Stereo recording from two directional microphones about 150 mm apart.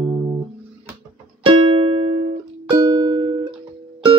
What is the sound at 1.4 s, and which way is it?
Music, 35° right (ahead or behind).